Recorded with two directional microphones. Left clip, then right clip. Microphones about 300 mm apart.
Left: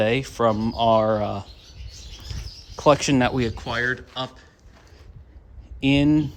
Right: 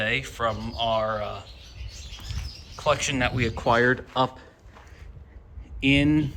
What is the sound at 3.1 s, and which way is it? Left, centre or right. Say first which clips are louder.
Speech: left 4 dB; centre.